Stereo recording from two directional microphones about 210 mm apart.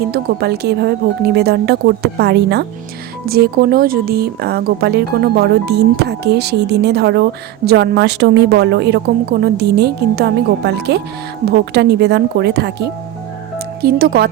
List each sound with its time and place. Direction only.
0.1 s speech: 50° right (ahead or behind)